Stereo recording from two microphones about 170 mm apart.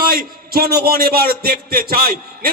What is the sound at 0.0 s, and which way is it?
A man's voice, 60° right (ahead or behind).